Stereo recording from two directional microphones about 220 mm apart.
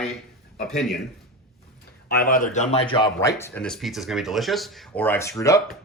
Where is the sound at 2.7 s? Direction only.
25° left (ahead or behind).